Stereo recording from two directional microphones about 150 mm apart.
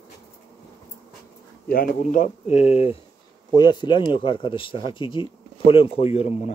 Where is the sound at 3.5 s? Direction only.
30° left (ahead or behind).